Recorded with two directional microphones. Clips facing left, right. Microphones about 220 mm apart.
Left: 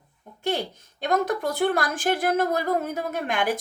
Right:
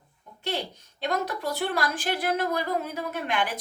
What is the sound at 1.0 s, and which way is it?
A woman's voice, 50° left (ahead or behind).